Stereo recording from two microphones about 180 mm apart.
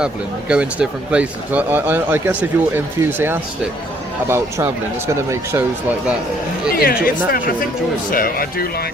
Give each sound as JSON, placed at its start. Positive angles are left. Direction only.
{"t": 0.0, "sound": "speech", "side_deg": -5}
{"t": 6.7, "sound": "speech", "side_deg": 55}